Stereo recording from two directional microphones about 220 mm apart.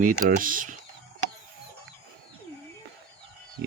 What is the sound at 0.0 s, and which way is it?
Speech, 40° right (ahead or behind).